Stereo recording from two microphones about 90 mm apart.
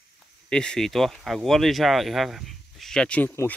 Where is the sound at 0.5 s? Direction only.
10° left (ahead or behind).